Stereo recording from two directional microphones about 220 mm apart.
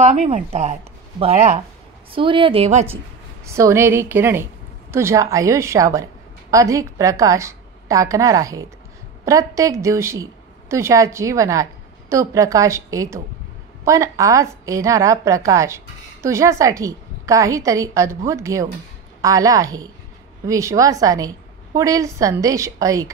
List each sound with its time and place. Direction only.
0.0 s a woman's voice: 30° right (ahead or behind)
3.4 s a woman's voice: 15° right (ahead or behind)